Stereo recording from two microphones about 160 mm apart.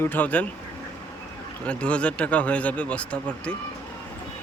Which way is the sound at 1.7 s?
5° left (ahead or behind).